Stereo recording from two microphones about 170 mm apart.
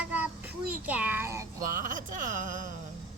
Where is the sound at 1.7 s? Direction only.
50° right (ahead or behind).